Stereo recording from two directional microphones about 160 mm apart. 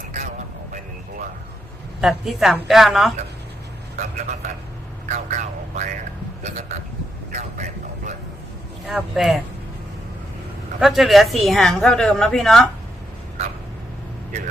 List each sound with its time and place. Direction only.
0.1 s vehicle: 50° right (ahead or behind)
2.0 s a woman's voice: centre (ahead or behind)
3.9 s a man's voice: 50° right (ahead or behind)
5.0 s vehicle: 50° right (ahead or behind)
7.3 s speech: 50° right (ahead or behind)
8.9 s a woman's voice: centre (ahead or behind)
10.8 s a woman's voice: centre (ahead or behind)